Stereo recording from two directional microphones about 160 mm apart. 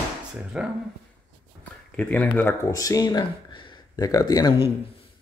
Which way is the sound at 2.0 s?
10° left (ahead or behind).